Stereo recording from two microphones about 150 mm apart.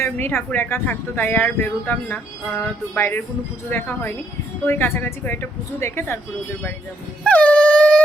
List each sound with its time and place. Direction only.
0.0 s speech: 15° left (ahead or behind)
7.3 s dog: 10° left (ahead or behind)